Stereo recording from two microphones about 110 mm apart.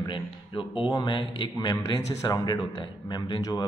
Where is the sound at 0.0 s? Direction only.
45° left (ahead or behind).